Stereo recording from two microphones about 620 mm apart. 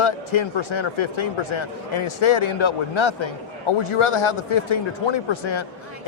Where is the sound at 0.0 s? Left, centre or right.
Left.